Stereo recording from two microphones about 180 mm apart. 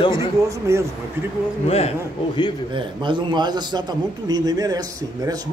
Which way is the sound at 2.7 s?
25° right (ahead or behind).